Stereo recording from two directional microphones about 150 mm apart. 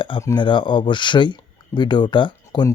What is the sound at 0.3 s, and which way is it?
Speech, 30° left (ahead or behind).